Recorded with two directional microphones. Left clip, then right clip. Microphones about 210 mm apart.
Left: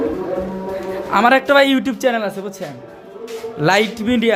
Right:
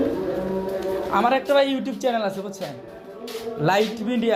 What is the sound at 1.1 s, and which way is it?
A man's voice, 30° left (ahead or behind).